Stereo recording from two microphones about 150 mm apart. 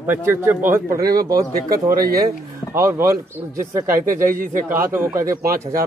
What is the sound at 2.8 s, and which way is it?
Speech, 15° right (ahead or behind).